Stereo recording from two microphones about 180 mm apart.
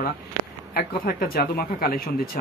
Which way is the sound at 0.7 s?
55° left (ahead or behind).